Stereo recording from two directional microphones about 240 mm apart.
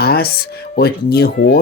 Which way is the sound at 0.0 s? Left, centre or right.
Left.